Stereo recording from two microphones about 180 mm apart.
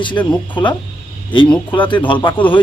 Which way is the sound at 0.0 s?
25° left (ahead or behind).